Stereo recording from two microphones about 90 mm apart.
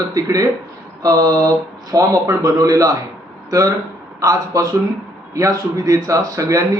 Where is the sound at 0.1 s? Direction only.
40° right (ahead or behind).